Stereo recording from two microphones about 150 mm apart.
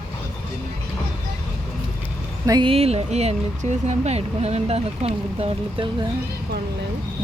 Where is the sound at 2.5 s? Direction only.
35° right (ahead or behind).